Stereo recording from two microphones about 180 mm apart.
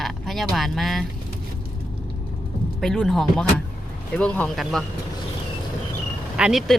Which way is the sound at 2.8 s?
Centre (ahead or behind).